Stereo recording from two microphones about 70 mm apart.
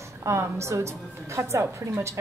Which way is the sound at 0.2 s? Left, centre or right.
Right.